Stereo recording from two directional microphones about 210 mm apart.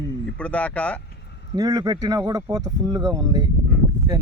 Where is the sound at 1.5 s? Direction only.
20° right (ahead or behind).